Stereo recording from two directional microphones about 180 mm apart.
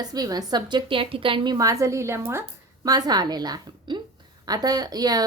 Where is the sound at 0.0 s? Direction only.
20° right (ahead or behind).